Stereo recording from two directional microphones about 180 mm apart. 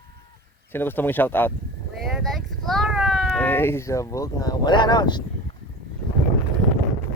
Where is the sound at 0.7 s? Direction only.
10° left (ahead or behind).